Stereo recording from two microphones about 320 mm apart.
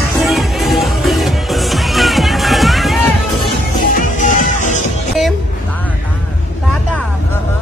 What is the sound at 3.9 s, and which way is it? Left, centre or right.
Music, left.